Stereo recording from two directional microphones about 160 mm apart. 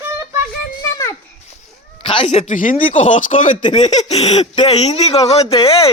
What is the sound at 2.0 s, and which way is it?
Speech, 35° left (ahead or behind).